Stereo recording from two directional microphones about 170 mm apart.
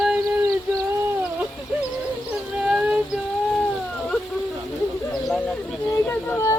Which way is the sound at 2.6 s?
5° right (ahead or behind).